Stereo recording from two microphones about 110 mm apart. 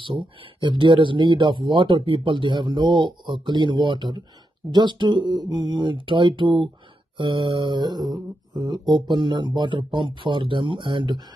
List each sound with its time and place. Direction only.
0.0 s speech: 50° right (ahead or behind)